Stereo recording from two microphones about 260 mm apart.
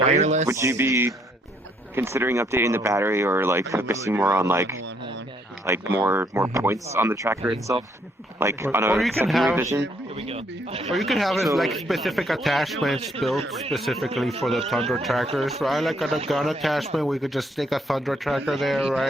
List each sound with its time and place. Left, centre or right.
0.0 s speech: right
0.4 s speech: centre
10.2 s speech: right
10.8 s speech: centre